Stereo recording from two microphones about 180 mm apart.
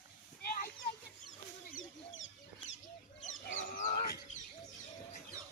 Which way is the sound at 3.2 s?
45° left (ahead or behind).